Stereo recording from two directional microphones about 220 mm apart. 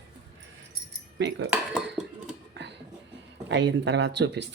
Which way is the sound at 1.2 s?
55° right (ahead or behind).